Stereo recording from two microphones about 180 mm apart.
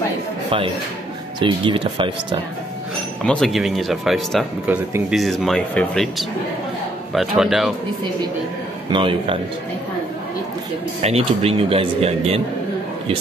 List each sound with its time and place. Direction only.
1.4 s speech: 30° right (ahead or behind)
3.2 s speech: 5° left (ahead or behind)
8.9 s speech: 30° right (ahead or behind)
11.0 s speech: 35° right (ahead or behind)